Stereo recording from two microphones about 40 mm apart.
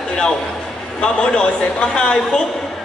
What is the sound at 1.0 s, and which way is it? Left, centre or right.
A man's voice, left.